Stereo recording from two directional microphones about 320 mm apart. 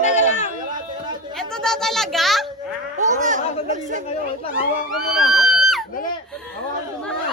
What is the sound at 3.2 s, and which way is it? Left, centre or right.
Speech, right.